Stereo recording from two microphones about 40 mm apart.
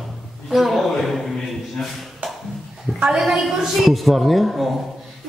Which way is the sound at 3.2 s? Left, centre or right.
Centre.